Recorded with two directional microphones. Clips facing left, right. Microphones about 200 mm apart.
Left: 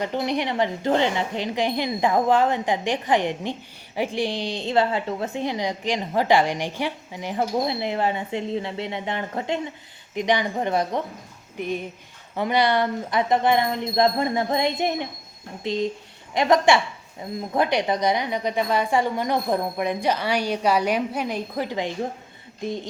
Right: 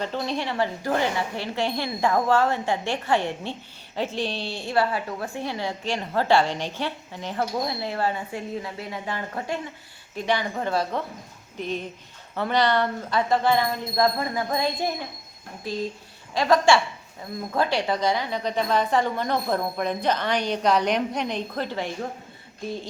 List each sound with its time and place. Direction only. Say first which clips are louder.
0.0 s a woman's voice: left 3 dB; 15° left (ahead or behind)